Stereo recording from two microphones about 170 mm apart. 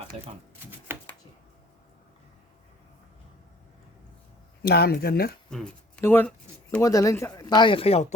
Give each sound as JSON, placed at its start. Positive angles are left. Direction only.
{"t": 0.9, "sound": "a sound", "side_deg": -15}
{"t": 4.6, "sound": "speech", "side_deg": 70}
{"t": 5.5, "sound": "speech", "side_deg": 5}